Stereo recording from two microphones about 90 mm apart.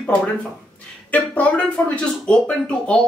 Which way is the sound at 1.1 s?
15° left (ahead or behind).